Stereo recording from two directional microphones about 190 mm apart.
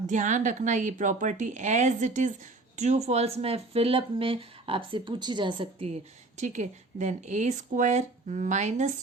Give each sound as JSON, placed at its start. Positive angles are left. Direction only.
{"t": 0.1, "sound": "speech", "side_deg": -40}